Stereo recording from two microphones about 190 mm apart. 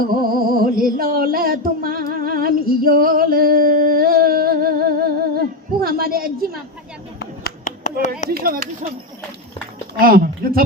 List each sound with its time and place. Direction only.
0.2 s music: 50° right (ahead or behind)
5.8 s a woman's voice: 50° right (ahead or behind)
7.2 s clapping: 50° left (ahead or behind)
8.3 s speech: 50° right (ahead or behind)
10.0 s speech: 50° right (ahead or behind)